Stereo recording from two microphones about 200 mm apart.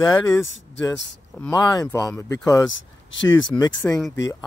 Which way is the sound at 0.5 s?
65° left (ahead or behind).